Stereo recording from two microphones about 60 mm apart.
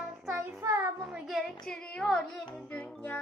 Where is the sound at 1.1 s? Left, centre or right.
Centre.